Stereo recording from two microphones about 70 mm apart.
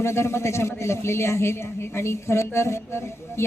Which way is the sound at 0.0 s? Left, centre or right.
Left.